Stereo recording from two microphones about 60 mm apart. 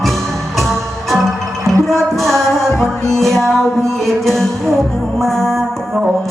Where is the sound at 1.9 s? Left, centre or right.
Centre.